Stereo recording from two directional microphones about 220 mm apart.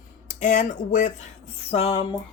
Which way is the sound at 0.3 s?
35° left (ahead or behind).